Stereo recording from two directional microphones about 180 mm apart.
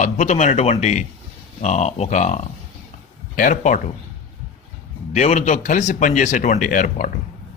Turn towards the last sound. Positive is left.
turn(degrees=45)  # may be behind; listen again after turning